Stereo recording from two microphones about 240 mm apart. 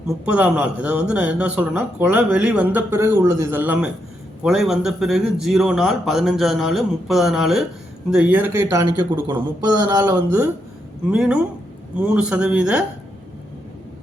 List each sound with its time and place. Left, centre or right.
0.3 s speech: centre